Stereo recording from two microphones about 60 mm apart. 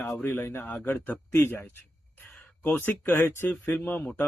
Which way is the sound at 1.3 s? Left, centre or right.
Left.